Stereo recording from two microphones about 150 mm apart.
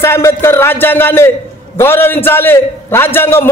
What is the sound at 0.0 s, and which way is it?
A man's voice, 15° left (ahead or behind).